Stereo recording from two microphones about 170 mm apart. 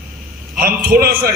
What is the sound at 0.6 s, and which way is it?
Speech, 65° right (ahead or behind).